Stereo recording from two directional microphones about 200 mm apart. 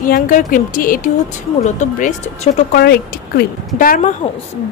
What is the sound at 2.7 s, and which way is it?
A woman's voice, 50° left (ahead or behind).